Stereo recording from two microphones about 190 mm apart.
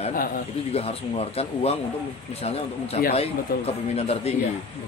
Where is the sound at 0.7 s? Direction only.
30° left (ahead or behind).